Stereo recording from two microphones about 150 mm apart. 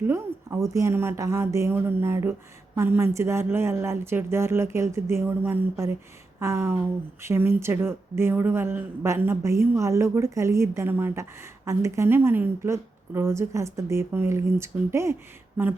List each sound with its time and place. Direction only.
0.1 s a woman's voice: 20° right (ahead or behind)